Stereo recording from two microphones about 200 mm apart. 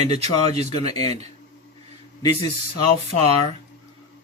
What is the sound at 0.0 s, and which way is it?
Speech, 30° right (ahead or behind).